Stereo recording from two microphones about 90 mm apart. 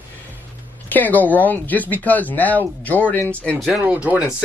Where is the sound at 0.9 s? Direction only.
20° left (ahead or behind).